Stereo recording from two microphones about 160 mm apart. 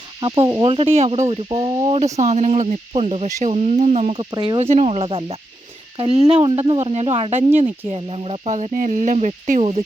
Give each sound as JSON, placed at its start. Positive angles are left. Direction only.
{"t": 0.2, "sound": "speech", "side_deg": -30}
{"t": 2.1, "sound": "speech", "side_deg": -45}